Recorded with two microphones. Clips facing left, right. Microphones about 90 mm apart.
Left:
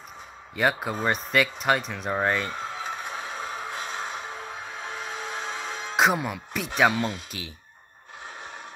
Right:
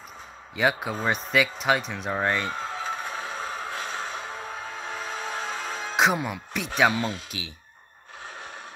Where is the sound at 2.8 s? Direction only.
15° left (ahead or behind).